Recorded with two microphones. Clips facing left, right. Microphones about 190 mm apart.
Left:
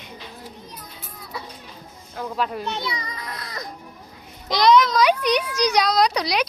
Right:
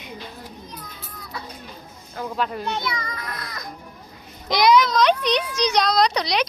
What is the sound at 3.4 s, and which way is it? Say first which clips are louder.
Music: left 2 dB; 35° left (ahead or behind).